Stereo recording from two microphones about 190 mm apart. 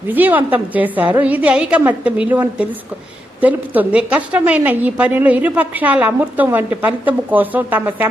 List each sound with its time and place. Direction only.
0.1 s a woman's voice: 10° right (ahead or behind)